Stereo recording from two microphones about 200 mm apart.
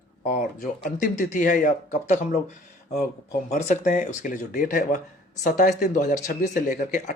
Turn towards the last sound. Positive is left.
turn(degrees=45)  # may be behind; listen again after turning